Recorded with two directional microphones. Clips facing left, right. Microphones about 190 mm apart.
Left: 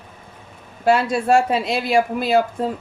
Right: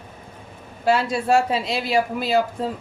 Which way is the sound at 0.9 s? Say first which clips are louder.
Left 3 dB; 55° left (ahead or behind).